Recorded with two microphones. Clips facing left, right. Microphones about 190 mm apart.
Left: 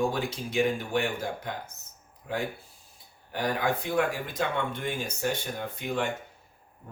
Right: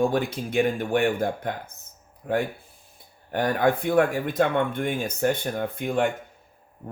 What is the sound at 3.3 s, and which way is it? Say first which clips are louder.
Speech: right 6 dB; 55° right (ahead or behind).